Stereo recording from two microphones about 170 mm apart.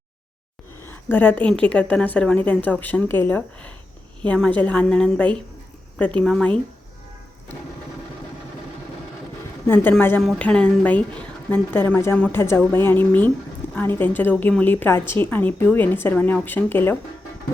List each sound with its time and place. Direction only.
0.9 s a woman's voice: 10° left (ahead or behind)
9.6 s a woman's voice: 10° left (ahead or behind)